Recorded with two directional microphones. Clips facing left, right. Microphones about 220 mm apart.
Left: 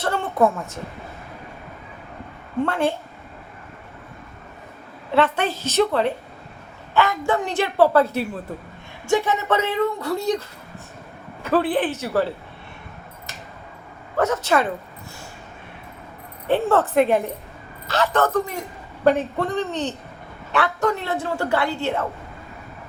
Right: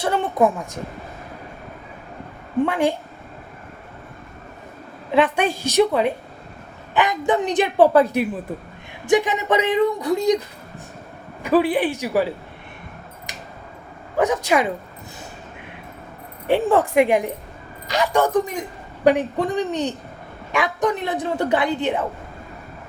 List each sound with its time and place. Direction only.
0.0 s a woman's voice: 15° right (ahead or behind)
2.6 s a woman's voice: 15° right (ahead or behind)
5.1 s a woman's voice: 15° right (ahead or behind)
11.4 s a woman's voice: 10° right (ahead or behind)
13.3 s scissors: 15° right (ahead or behind)
14.2 s a woman's voice: 15° right (ahead or behind)
16.5 s a woman's voice: 15° right (ahead or behind)